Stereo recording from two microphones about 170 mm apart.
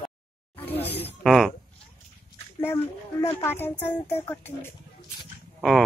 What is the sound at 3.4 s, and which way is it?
Speech, 10° left (ahead or behind).